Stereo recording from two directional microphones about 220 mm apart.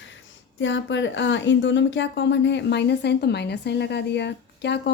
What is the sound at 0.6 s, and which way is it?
A woman's voice, 55° left (ahead or behind).